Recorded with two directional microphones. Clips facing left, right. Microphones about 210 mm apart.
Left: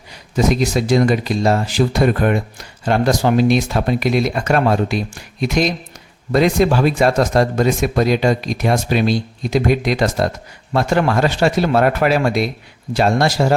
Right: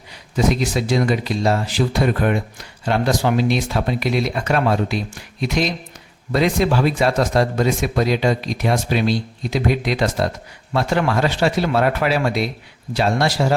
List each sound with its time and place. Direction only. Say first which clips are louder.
0.3 s speech: left 3 dB; 45° left (ahead or behind)
6.3 s speech: left 3 dB; 45° left (ahead or behind)